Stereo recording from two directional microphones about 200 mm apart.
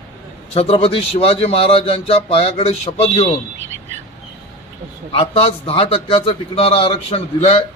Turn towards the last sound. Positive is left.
turn(degrees=30)  # may be behind; listen again after turning